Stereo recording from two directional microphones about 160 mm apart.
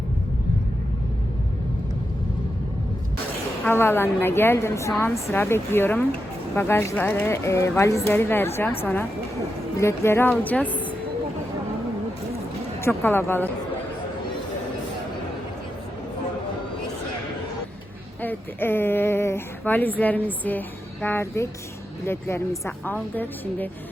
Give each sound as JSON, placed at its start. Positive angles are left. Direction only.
{"t": 3.7, "sound": "a woman's voice", "side_deg": 15}
{"t": 13.0, "sound": "a woman's voice", "side_deg": 15}
{"t": 18.2, "sound": "a woman's voice", "side_deg": 10}